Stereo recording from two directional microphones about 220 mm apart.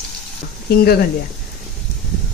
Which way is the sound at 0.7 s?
45° left (ahead or behind).